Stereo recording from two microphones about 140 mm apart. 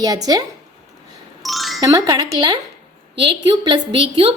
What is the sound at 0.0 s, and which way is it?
Speech, 25° right (ahead or behind).